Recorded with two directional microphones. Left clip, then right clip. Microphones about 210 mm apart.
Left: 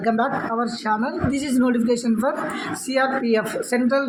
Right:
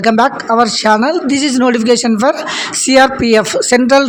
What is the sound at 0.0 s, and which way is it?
A man's voice, 50° right (ahead or behind).